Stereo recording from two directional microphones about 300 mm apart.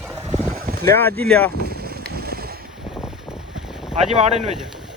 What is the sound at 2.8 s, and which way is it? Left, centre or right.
Boat, centre.